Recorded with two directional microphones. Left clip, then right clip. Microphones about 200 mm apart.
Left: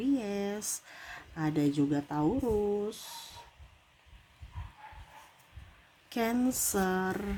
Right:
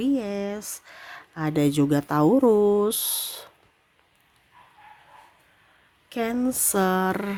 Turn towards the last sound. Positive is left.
turn(degrees=-40)  # may be behind; listen again after turning